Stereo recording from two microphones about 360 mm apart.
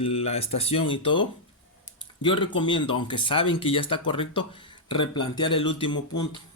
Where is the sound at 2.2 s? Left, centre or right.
Centre.